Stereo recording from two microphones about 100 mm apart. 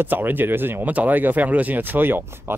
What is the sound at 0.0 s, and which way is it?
Speech, 20° right (ahead or behind).